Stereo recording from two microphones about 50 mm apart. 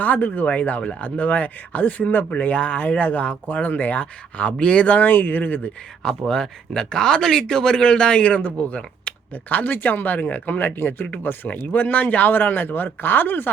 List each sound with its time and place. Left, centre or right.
0.0 s speech: left
6.0 s speech: centre; by 13.5 s left